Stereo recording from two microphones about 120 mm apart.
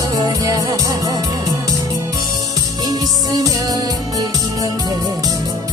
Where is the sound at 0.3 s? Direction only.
30° right (ahead or behind).